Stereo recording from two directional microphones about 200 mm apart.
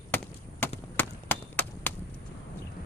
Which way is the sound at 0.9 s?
10° left (ahead or behind).